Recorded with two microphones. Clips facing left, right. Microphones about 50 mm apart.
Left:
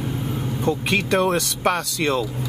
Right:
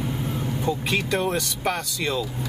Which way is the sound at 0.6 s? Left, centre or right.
Left.